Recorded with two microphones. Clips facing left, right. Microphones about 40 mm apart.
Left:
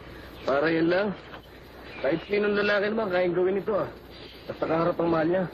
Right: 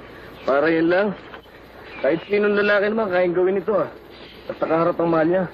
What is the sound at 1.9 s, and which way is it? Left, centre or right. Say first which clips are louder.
Speech: right 6 dB; right.